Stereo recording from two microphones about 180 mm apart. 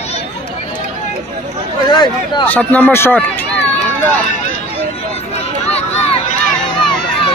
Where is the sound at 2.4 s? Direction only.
10° left (ahead or behind).